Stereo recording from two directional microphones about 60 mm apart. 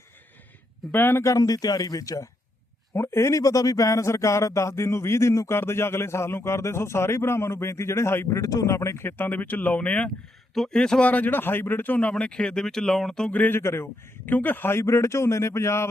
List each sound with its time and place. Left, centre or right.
0.9 s speech: left
1.2 s speech: left
2.9 s speech: left
3.4 s a man's voice: left
8.4 s speech: left
8.6 s a man's voice: left
9.0 s speech: left
10.5 s speech: centre
11.0 s speech: left
12.2 s speech: centre
13.5 s a man's voice: left
14.3 s a man's voice: left